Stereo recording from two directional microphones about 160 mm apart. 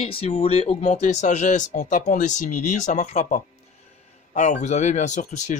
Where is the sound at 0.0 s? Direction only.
35° left (ahead or behind).